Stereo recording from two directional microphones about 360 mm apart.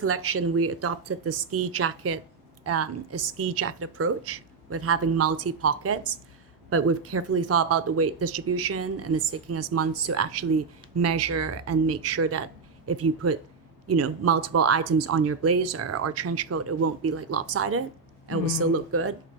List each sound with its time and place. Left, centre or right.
0.0 s speech: right